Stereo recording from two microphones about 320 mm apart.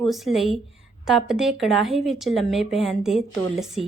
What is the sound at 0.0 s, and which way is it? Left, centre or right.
A woman's voice, centre.